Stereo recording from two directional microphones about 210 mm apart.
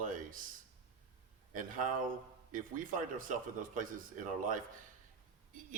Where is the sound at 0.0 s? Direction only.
40° right (ahead or behind).